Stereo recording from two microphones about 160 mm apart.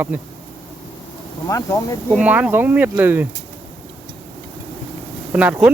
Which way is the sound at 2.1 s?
10° right (ahead or behind).